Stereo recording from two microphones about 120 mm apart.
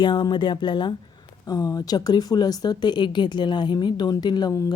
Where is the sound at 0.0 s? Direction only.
40° left (ahead or behind).